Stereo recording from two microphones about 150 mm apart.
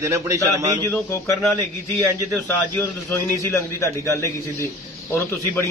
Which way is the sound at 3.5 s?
20° left (ahead or behind).